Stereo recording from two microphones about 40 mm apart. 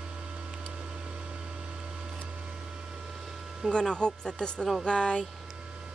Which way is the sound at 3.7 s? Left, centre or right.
Left.